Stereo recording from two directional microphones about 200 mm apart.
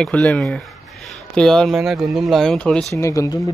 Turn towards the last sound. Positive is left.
turn(degrees=15)  # may be behind; listen again after turning